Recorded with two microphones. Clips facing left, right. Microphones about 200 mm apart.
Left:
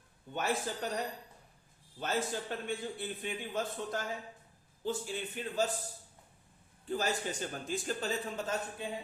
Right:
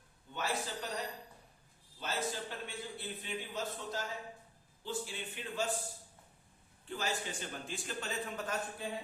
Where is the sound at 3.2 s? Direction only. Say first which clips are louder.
Left 3 dB; 55° left (ahead or behind).